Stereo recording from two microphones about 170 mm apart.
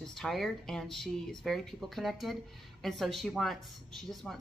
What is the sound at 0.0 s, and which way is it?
Speech, centre (ahead or behind).